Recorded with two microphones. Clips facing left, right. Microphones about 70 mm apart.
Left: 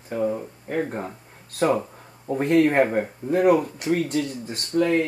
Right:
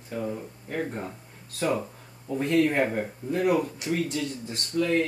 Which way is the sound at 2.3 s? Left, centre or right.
Left.